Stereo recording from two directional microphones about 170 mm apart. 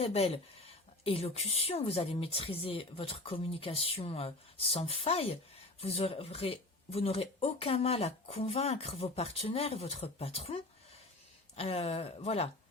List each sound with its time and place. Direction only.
0.0 s speech: 35° left (ahead or behind)